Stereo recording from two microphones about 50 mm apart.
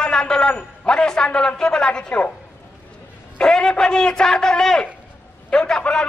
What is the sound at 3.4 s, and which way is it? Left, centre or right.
A man's voice, centre.